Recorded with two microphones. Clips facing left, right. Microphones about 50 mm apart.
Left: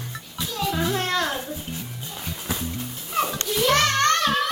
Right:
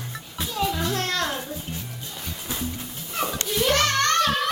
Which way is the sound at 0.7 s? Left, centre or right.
Centre.